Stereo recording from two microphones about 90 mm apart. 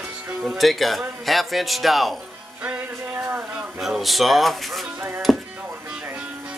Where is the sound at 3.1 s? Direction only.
25° right (ahead or behind).